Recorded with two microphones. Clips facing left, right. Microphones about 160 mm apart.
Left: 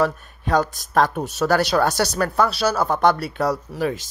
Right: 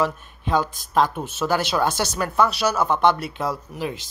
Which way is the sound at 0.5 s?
45° left (ahead or behind).